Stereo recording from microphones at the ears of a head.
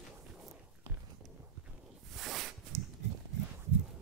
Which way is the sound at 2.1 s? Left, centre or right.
Right.